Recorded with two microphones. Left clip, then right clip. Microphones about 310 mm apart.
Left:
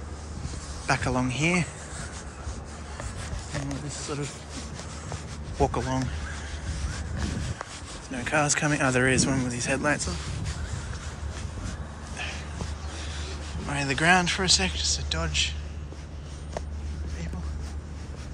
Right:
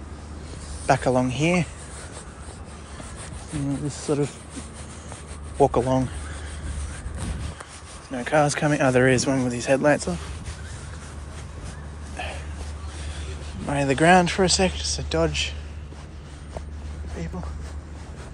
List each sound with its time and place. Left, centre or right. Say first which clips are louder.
0.8 s speech: right 6 dB; centre
4.0 s speech: right 11 dB; centre
5.6 s speech: right 7 dB; centre
8.1 s speech: right 4 dB; centre
13.7 s speech: right 5 dB; centre